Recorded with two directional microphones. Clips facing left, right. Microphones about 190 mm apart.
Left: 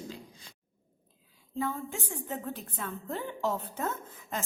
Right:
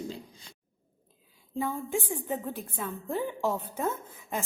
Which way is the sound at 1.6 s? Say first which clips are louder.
Right 3 dB; 15° right (ahead or behind).